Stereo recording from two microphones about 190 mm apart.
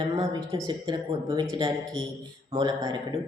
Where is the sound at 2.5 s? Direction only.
20° right (ahead or behind).